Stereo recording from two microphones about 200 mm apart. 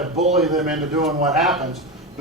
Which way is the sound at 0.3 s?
Centre (ahead or behind).